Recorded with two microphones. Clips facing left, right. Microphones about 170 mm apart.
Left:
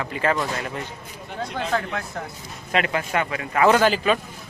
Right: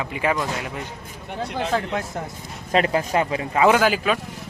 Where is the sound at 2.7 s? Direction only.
35° right (ahead or behind).